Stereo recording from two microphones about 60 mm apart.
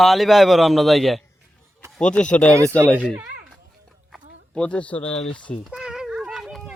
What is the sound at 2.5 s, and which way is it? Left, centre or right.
Speech, right.